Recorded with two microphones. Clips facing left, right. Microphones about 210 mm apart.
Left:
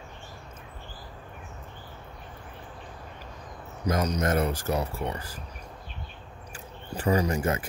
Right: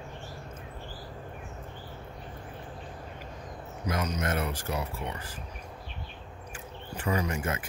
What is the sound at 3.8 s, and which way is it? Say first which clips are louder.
Speech: left 5 dB; 40° left (ahead or behind).